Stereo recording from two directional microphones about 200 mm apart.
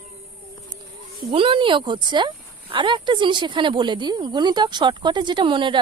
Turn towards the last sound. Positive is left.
turn(degrees=-25)  # may be behind; listen again after turning